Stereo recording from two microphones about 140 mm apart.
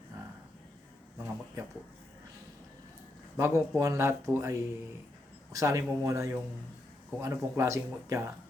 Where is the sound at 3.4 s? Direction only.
15° right (ahead or behind).